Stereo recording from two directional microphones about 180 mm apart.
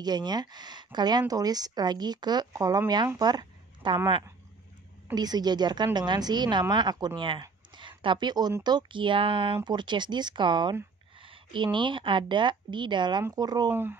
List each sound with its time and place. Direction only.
0.0 s a woman's voice: 25° right (ahead or behind)